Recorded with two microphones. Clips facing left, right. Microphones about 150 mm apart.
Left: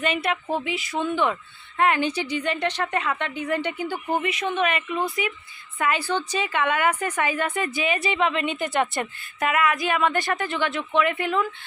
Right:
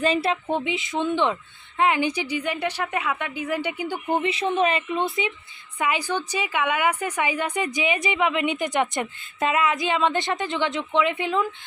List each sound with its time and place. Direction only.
0.0 s a woman's voice: 30° right (ahead or behind); by 4.0 s 15° right (ahead or behind)
4.2 s speech: 30° right (ahead or behind)
5.8 s a woman's voice: 15° right (ahead or behind)